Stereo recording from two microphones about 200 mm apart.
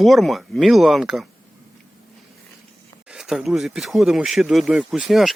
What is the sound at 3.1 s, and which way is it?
Speech, 5° right (ahead or behind).